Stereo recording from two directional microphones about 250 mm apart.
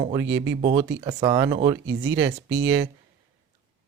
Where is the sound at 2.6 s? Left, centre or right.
Centre.